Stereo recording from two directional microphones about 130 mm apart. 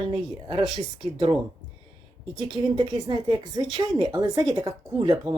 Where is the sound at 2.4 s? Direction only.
35° right (ahead or behind).